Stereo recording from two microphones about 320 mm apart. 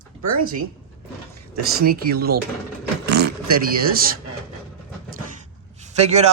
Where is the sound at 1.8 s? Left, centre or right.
Right.